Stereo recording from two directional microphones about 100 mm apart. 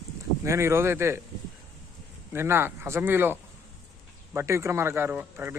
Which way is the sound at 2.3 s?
25° right (ahead or behind).